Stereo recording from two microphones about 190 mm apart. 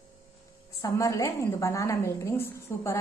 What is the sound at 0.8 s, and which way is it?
A woman's voice, 15° left (ahead or behind).